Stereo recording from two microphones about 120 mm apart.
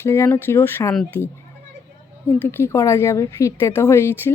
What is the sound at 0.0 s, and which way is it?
Speech, 20° left (ahead or behind).